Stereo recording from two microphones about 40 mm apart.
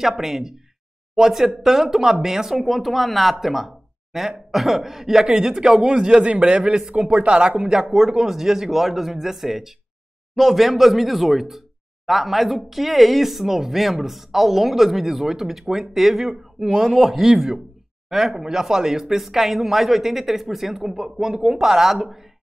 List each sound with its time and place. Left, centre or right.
0.0 s a man's voice: centre
7.9 s speech: centre